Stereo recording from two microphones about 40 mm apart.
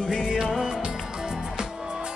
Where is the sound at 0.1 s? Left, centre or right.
Centre.